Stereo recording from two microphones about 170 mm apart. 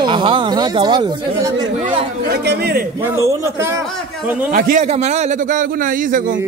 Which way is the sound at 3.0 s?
15° right (ahead or behind).